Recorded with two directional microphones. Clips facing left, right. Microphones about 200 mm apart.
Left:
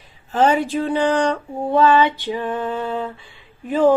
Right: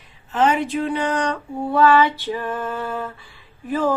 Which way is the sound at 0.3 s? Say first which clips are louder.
Left 2 dB; 30° left (ahead or behind).